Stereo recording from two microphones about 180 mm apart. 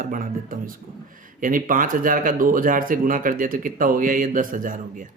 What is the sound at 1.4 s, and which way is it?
Speech, 50° right (ahead or behind).